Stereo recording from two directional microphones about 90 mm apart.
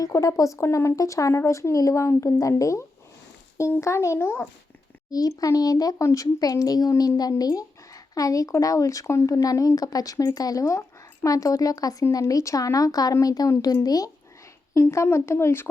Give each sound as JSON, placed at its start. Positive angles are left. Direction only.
{"t": 0.0, "sound": "speech", "side_deg": 35}
{"t": 5.1, "sound": "a child's voice", "side_deg": 40}
{"t": 14.7, "sound": "speech", "side_deg": 30}